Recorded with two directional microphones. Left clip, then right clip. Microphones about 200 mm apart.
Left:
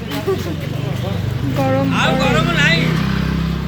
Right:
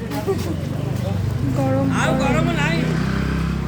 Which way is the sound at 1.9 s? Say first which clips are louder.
Left 4 dB; 65° right (ahead or behind).